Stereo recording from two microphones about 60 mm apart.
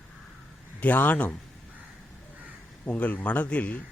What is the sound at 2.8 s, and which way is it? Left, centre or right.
Speech, left.